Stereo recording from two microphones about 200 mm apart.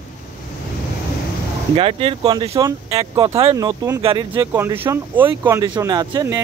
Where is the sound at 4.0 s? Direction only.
25° right (ahead or behind).